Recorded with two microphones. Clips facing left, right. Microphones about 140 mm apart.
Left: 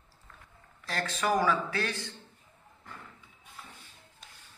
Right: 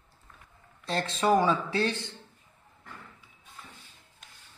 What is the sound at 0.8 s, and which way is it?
A man's voice, 25° right (ahead or behind).